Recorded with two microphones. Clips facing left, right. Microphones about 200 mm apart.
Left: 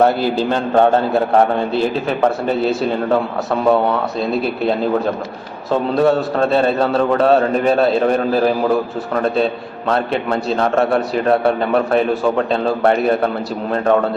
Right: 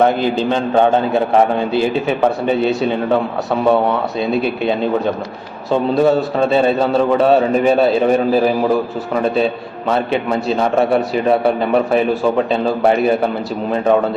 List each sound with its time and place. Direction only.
0.0 s a man's voice: 5° left (ahead or behind)